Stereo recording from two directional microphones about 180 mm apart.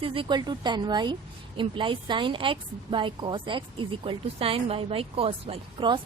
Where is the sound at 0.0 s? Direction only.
30° right (ahead or behind).